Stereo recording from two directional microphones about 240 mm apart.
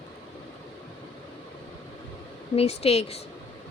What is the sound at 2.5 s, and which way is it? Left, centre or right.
Speech, left.